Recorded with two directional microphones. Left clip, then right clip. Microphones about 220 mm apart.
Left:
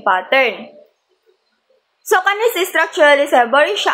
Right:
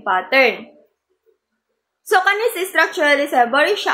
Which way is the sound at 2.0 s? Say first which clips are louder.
Left 1 dB; 5° left (ahead or behind).